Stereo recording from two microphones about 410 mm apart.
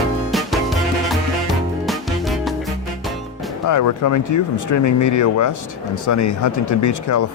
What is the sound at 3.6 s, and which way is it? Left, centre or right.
Speech, left.